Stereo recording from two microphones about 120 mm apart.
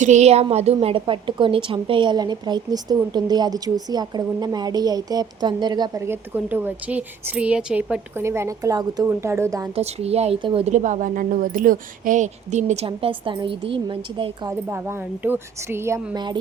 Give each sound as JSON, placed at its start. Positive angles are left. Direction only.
{"t": 0.0, "sound": "a woman's voice", "side_deg": -70}
{"t": 6.1, "sound": "a woman's voice", "side_deg": -15}
{"t": 8.2, "sound": "speech", "side_deg": -20}
{"t": 9.7, "sound": "speech", "side_deg": -60}
{"t": 10.4, "sound": "a woman's voice", "side_deg": -50}
{"t": 10.7, "sound": "a woman's voice", "side_deg": -90}
{"t": 14.7, "sound": "speech", "side_deg": -20}
{"t": 16.1, "sound": "a woman's voice", "side_deg": -40}